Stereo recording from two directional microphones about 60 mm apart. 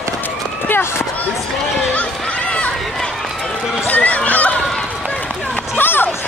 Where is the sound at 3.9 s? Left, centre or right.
Left.